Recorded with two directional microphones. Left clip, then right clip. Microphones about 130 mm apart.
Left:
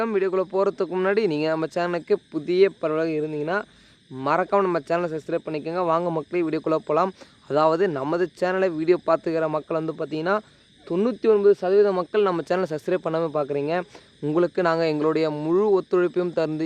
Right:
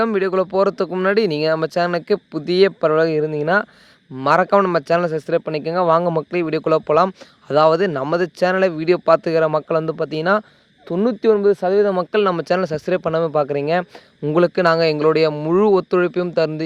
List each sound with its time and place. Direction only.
0.0 s speech: 45° right (ahead or behind); by 3.7 s 65° right (ahead or behind)
4.2 s speech: 50° right (ahead or behind)
10.8 s speech: 35° right (ahead or behind)